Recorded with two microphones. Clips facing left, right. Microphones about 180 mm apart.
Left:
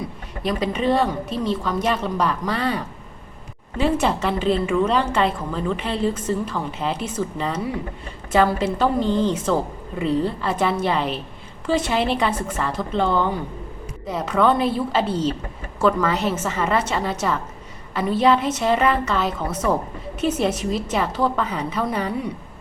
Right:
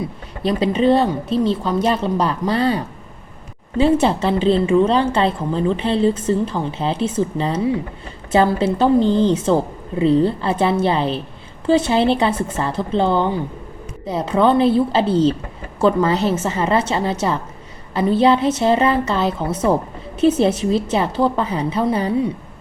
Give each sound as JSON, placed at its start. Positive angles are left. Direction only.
{"t": 0.4, "sound": "a woman's voice", "side_deg": -30}